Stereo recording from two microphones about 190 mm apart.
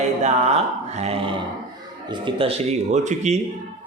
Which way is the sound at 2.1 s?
25° right (ahead or behind).